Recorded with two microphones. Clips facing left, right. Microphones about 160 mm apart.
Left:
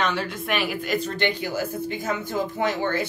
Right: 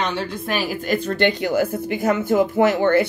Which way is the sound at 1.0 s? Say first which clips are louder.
Right 6 dB; 60° right (ahead or behind).